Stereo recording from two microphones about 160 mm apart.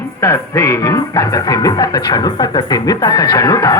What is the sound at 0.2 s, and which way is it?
Music, 20° left (ahead or behind).